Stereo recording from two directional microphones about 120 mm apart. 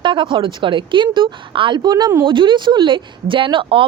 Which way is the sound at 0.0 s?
40° right (ahead or behind).